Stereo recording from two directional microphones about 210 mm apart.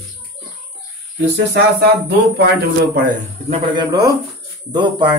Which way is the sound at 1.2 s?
50° right (ahead or behind).